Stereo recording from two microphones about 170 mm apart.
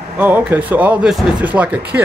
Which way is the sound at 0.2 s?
10° right (ahead or behind).